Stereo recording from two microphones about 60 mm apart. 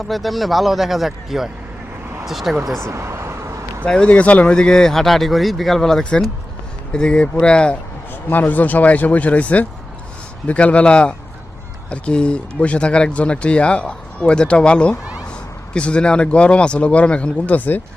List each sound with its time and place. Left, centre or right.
0.0 s speech: centre
2.8 s vehicle: right
3.8 s speech: centre
8.1 s speech: left